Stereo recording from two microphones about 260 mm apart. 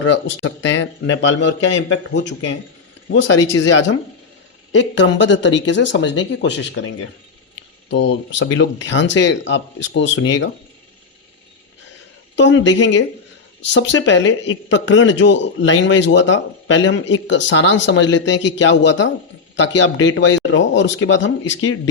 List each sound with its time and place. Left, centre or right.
0.0 s a man's voice: left
12.4 s a man's voice: left